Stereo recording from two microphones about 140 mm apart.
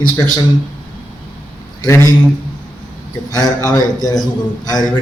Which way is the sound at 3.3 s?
30° left (ahead or behind).